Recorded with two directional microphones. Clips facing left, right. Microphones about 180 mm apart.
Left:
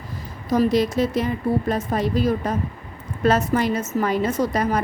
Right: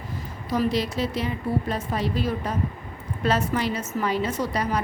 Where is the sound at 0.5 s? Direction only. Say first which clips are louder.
Left 6 dB; 45° left (ahead or behind).